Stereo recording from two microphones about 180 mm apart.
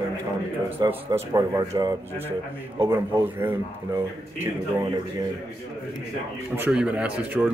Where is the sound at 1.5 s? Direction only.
15° right (ahead or behind).